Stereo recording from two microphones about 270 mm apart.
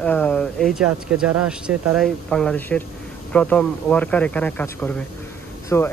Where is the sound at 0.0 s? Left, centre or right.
Centre.